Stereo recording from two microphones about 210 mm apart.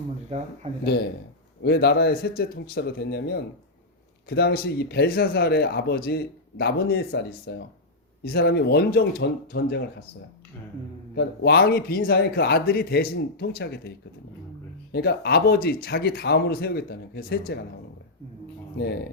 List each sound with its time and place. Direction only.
0.3 s a man's voice: 30° right (ahead or behind)
1.6 s speech: 50° left (ahead or behind)
11.1 s speech: 55° left (ahead or behind)
14.9 s speech: 50° left (ahead or behind)